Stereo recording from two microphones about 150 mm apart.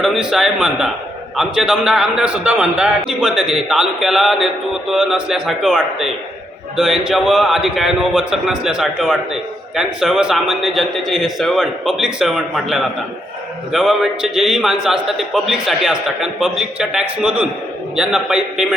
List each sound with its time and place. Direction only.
0.0 s a man's voice: 5° right (ahead or behind)